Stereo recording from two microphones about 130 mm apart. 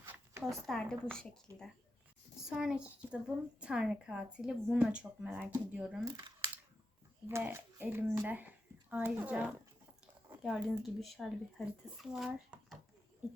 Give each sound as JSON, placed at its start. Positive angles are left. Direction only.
{"t": 0.0, "sound": "a sound", "side_deg": -20}
{"t": 0.7, "sound": "a child's voice", "side_deg": 5}
{"t": 2.5, "sound": "a child's voice", "side_deg": -5}
{"t": 6.1, "sound": "camera", "side_deg": -35}
{"t": 7.3, "sound": "a woman's voice", "side_deg": -20}